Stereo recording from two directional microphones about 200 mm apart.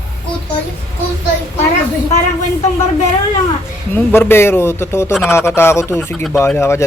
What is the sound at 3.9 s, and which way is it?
Speech, 10° left (ahead or behind).